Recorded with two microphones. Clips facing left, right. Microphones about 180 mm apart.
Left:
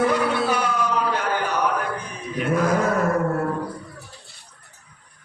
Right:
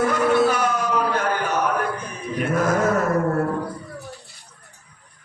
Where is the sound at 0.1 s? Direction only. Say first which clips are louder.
Right 3 dB; 45° right (ahead or behind).